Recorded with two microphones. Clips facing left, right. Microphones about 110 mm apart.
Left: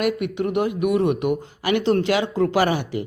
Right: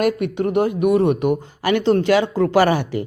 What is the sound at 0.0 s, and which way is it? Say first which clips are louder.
Speech: right 3 dB; 40° right (ahead or behind).